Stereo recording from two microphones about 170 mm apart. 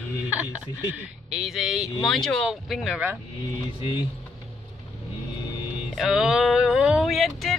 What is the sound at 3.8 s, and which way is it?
Speech, 30° left (ahead or behind).